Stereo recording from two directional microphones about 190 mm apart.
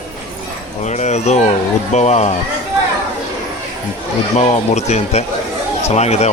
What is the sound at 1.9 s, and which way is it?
Speech, 35° left (ahead or behind).